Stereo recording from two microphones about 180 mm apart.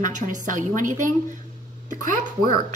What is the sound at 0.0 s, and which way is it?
A woman's voice, 45° right (ahead or behind).